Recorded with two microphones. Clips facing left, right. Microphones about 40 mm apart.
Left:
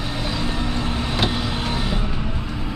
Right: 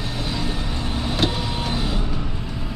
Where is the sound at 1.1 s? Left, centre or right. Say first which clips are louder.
Even; centre.